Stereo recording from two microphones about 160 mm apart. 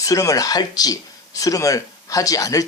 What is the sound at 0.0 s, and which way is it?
Speech, 20° left (ahead or behind).